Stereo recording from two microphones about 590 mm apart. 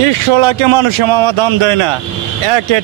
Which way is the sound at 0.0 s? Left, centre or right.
Right.